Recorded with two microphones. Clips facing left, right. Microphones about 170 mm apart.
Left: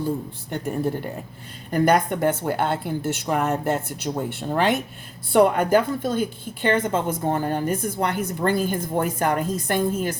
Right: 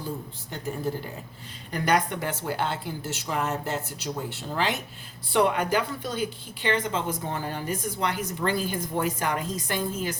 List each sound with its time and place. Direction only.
0.5 s a woman's voice: 55° left (ahead or behind)
1.7 s a woman's voice: 50° left (ahead or behind)